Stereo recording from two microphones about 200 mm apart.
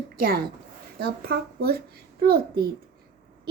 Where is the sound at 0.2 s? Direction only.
50° right (ahead or behind).